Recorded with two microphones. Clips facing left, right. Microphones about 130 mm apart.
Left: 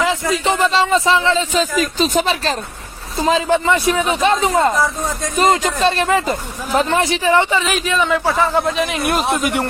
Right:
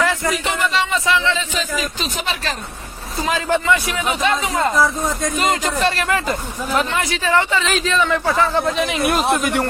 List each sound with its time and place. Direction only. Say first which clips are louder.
0.0 s a sound: left 1 dB; 20° left (ahead or behind)
0.4 s speech: left 9 dB; 30° left (ahead or behind)
4.7 s speech: right 1 dB; centre (ahead or behind)
5.4 s a man's voice: left 6 dB; 30° left (ahead or behind); by 9.4 s centre (ahead or behind)
9.4 s a man's voice: left 1 dB; 10° left (ahead or behind)